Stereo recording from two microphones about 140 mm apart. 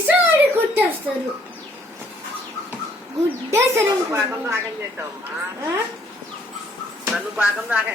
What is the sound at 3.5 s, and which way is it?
A man's voice, 20° right (ahead or behind).